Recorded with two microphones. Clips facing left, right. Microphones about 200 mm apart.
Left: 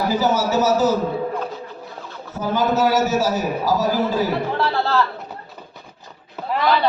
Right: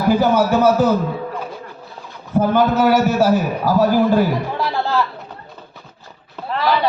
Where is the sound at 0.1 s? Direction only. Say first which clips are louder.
Right 8 dB; 60° right (ahead or behind).